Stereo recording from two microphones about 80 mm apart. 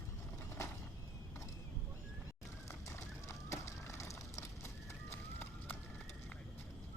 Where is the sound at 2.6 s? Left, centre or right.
Left.